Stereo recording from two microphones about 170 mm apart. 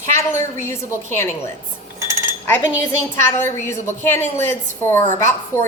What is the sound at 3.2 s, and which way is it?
A woman's voice, 15° left (ahead or behind).